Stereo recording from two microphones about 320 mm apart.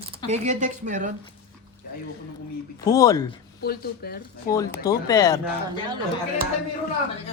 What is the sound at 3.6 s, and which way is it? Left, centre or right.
Speech, left.